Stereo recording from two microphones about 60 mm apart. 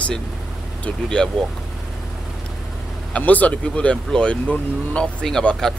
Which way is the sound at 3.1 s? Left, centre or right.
Left.